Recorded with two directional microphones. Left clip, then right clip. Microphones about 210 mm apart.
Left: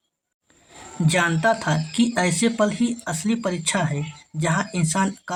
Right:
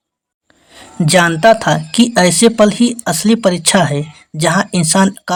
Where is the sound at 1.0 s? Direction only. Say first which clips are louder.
Right 11 dB; 35° right (ahead or behind).